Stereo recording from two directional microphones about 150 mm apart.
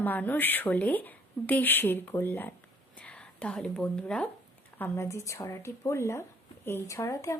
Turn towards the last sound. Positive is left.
turn(degrees=20)  # may be behind; listen again after turning